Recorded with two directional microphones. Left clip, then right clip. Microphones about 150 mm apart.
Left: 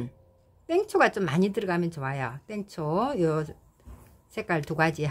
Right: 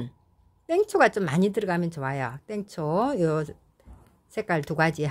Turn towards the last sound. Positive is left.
turn(degrees=-35)  # may be behind; listen again after turning